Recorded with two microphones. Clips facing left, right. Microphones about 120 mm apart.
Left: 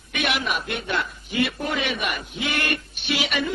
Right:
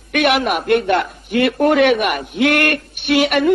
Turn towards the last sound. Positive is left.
turn(degrees=-60)  # may be behind; listen again after turning